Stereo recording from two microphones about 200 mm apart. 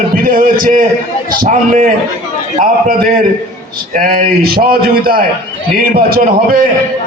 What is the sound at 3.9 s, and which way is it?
A man's voice, 45° right (ahead or behind).